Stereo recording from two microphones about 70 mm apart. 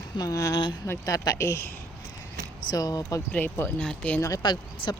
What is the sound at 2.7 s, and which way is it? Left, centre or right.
Speech, left.